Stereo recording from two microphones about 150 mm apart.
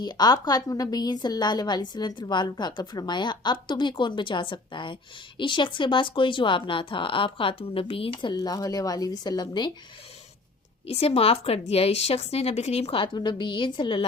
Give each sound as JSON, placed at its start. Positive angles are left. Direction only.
{"t": 0.0, "sound": "a woman's voice", "side_deg": 30}
{"t": 10.8, "sound": "a woman's voice", "side_deg": 40}